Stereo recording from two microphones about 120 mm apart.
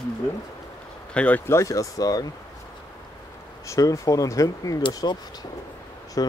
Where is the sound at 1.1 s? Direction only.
15° left (ahead or behind); by 2.2 s 30° left (ahead or behind).